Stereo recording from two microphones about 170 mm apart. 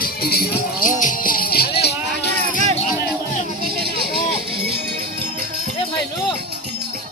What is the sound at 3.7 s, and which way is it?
Vehicle, 65° right (ahead or behind).